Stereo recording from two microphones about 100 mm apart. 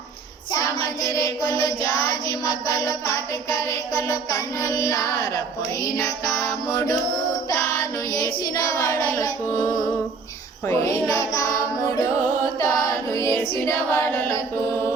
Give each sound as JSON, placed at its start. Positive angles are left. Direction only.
{"t": 0.5, "sound": "child singing", "side_deg": 35}
{"t": 8.1, "sound": "child singing", "side_deg": 40}
{"t": 12.5, "sound": "music", "side_deg": 35}